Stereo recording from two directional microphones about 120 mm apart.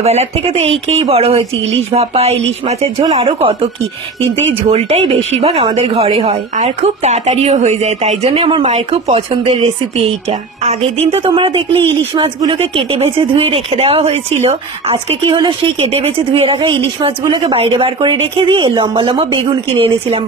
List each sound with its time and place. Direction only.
0.0 s speech: 60° right (ahead or behind)
4.6 s speech: 60° right (ahead or behind)
6.5 s speech: 70° right (ahead or behind); by 8.6 s 50° right (ahead or behind)
8.6 s a woman's voice: 60° right (ahead or behind)
10.6 s a woman's voice: 65° right (ahead or behind); by 11.6 s 45° right (ahead or behind)
11.7 s speech: 15° left (ahead or behind)
12.5 s speech: 55° right (ahead or behind)
16.5 s a woman's voice: 45° right (ahead or behind)
17.2 s speech: 35° right (ahead or behind)
17.6 s a woman's voice: 50° right (ahead or behind)